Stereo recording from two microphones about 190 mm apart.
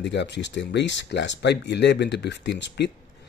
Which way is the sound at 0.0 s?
65° left (ahead or behind).